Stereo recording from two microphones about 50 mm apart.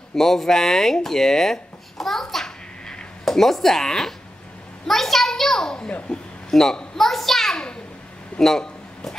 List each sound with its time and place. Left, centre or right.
0.1 s a child's voice: centre
5.9 s speech: left
6.5 s a child's voice: centre
7.5 s a sound: centre